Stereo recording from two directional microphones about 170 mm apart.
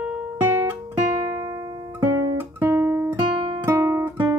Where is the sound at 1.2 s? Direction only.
15° right (ahead or behind).